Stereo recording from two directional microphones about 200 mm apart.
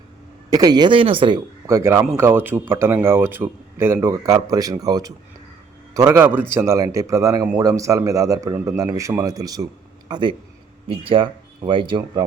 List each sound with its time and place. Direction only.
0.5 s speech: 20° right (ahead or behind)